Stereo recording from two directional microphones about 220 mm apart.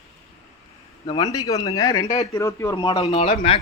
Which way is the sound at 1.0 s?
20° left (ahead or behind).